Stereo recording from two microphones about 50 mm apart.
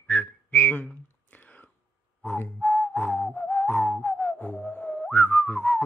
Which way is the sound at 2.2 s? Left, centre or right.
Left.